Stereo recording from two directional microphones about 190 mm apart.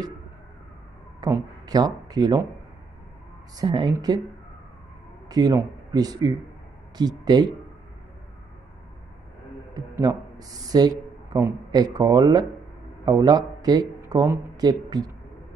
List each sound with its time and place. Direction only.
1.2 s speech: 20° right (ahead or behind)
3.5 s speech: 20° right (ahead or behind)
5.3 s speech: 20° right (ahead or behind)
9.8 s speech: 20° right (ahead or behind)